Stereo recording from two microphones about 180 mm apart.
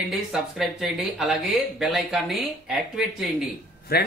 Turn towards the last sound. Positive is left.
turn(degrees=60)  # may be behind; listen again after turning